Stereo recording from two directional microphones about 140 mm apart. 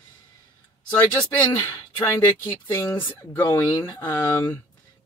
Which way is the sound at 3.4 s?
30° left (ahead or behind).